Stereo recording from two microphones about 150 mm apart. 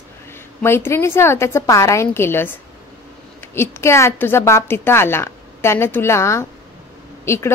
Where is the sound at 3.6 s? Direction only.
15° left (ahead or behind).